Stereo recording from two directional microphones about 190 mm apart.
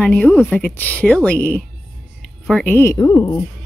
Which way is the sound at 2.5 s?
5° left (ahead or behind).